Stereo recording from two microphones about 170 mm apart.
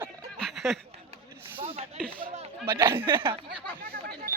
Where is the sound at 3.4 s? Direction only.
60° right (ahead or behind).